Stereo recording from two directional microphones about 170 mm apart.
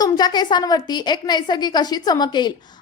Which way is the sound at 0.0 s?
25° left (ahead or behind).